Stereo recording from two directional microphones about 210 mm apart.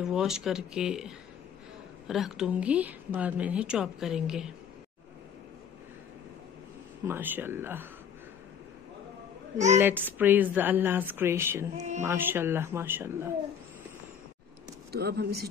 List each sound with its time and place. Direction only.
0.0 s speech: 5° right (ahead or behind)
7.1 s speech: 10° right (ahead or behind)
9.8 s speech: 10° right (ahead or behind)
11.7 s music: 35° right (ahead or behind)
12.0 s speech: 10° right (ahead or behind)
14.9 s speech: 50° right (ahead or behind)